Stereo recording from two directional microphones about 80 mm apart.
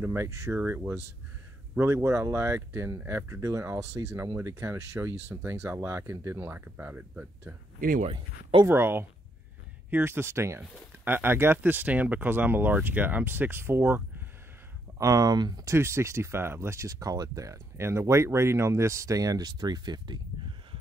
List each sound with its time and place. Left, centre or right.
0.0 s speech: right
0.5 s speech: right
1.8 s speech: right
8.6 s speech: right
15.0 s speech: right
15.6 s speech: right